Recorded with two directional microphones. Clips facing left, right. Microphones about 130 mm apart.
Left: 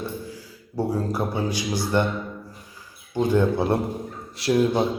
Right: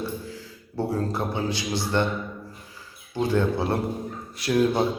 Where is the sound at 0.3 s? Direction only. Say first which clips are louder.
Left 2 dB; 10° left (ahead or behind).